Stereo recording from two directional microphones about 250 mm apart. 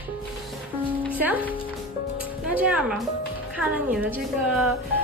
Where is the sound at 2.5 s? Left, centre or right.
Centre.